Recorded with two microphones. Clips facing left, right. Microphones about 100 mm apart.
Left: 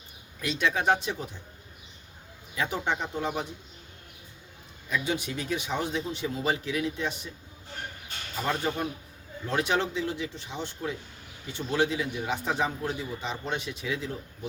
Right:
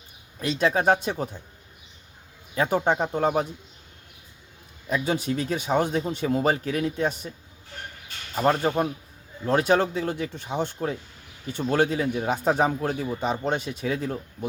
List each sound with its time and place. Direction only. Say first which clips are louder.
0.3 s speech: right 5 dB; 35° right (ahead or behind)
2.6 s a man's voice: right 7 dB; 45° right (ahead or behind)
4.9 s a man's voice: right 5 dB; 40° right (ahead or behind)
8.4 s a man's voice: right 7 dB; 45° right (ahead or behind)